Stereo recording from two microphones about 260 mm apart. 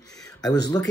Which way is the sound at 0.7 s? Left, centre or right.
Centre.